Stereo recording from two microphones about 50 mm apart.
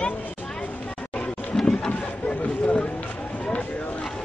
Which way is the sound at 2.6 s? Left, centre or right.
Left.